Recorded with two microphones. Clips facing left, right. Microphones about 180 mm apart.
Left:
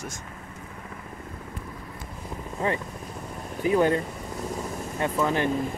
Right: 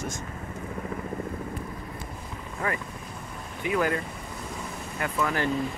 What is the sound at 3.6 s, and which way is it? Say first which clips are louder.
Speech: left 5 dB; 30° left (ahead or behind).